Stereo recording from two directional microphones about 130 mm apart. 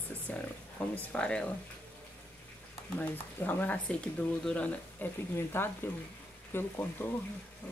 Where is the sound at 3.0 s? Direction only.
15° left (ahead or behind).